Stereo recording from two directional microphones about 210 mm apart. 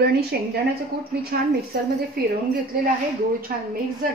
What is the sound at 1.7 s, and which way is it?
Speech, 45° right (ahead or behind).